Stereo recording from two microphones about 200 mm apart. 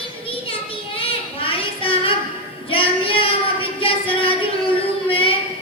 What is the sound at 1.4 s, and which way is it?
Child singing, 25° left (ahead or behind).